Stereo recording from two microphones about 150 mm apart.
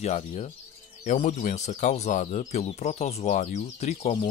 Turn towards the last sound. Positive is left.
turn(degrees=40)  # may be behind; listen again after turning